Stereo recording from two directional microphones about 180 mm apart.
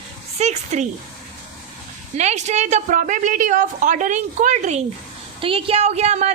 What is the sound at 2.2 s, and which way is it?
A woman's voice, 40° right (ahead or behind).